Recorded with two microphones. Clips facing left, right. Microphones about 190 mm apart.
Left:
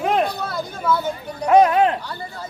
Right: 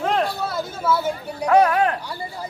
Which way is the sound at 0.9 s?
5° right (ahead or behind).